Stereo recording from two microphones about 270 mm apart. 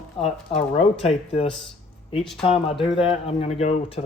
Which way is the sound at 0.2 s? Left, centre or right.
Left.